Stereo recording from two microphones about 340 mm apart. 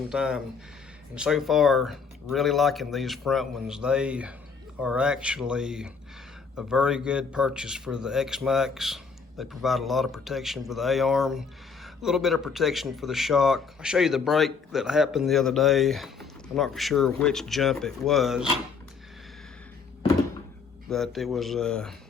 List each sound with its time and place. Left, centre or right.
0.1 s a man's voice: centre
20.9 s a man's voice: centre